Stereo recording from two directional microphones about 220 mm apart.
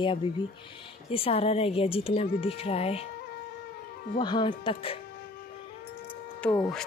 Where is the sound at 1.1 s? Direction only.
25° left (ahead or behind).